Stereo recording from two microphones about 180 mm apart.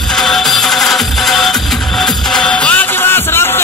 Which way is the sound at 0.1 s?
Centre (ahead or behind).